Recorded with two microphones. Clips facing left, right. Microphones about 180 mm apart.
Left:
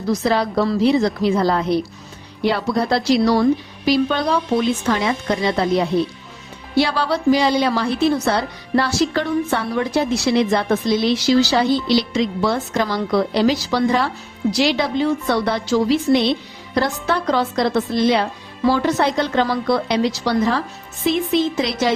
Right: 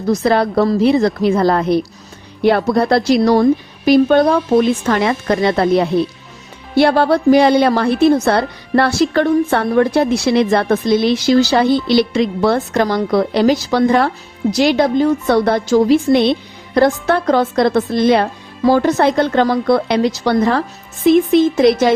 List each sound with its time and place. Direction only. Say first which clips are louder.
0.1 s a woman's voice: right 4 dB; 55° right (ahead or behind)